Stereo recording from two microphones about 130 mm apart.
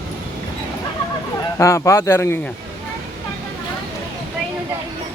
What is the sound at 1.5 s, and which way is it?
Speech, 20° left (ahead or behind).